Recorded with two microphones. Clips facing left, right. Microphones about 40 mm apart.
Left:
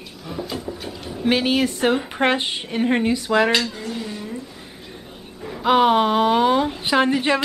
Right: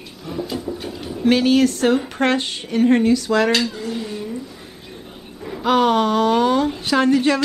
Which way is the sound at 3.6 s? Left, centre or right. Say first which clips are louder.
Right 3 dB; centre.